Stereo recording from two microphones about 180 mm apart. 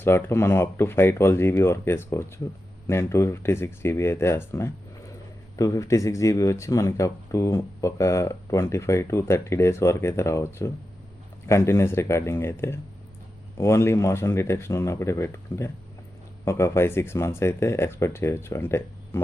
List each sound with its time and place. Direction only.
0.0 s speech: 15° left (ahead or behind)